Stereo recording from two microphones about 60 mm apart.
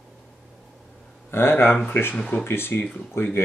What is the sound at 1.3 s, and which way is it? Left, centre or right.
Speech, left.